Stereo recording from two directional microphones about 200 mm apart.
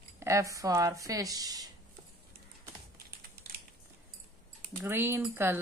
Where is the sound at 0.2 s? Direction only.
15° right (ahead or behind).